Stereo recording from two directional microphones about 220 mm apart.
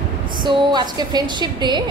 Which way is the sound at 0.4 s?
20° right (ahead or behind).